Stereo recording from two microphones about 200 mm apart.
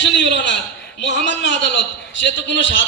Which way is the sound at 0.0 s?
60° left (ahead or behind).